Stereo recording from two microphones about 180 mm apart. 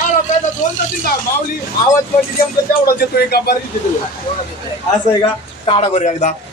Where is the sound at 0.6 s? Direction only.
40° left (ahead or behind).